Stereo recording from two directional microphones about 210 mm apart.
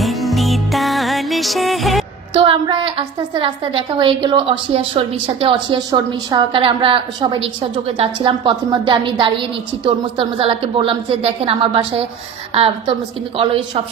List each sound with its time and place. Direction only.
0.0 s music: centre (ahead or behind)
2.3 s a woman's voice: 25° right (ahead or behind)